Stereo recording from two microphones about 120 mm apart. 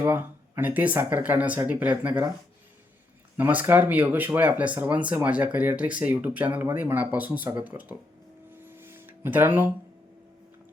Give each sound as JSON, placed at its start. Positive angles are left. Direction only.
{"t": 0.0, "sound": "speech", "side_deg": -20}
{"t": 3.3, "sound": "speech", "side_deg": -15}
{"t": 8.6, "sound": "guitar", "side_deg": -20}